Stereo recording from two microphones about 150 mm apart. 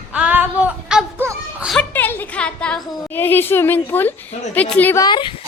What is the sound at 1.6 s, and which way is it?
A woman's voice, 10° left (ahead or behind).